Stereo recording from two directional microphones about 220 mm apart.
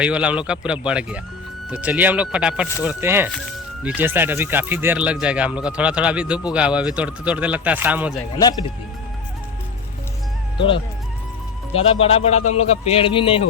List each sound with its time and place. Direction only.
0.0 s speech: 5° right (ahead or behind)
11.7 s a man's voice: 25° left (ahead or behind)